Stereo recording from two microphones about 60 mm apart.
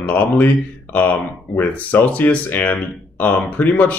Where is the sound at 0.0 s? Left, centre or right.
Left.